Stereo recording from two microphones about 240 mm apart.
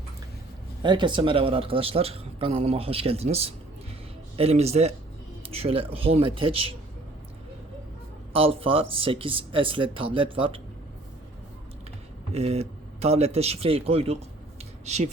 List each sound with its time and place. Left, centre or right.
0.8 s a man's voice: centre
8.3 s a man's voice: right
12.3 s a man's voice: right